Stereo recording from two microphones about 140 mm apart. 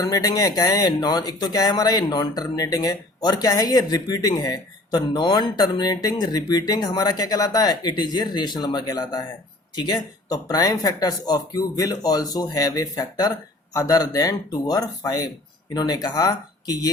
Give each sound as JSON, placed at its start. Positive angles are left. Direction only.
{"t": 0.0, "sound": "speech", "side_deg": 25}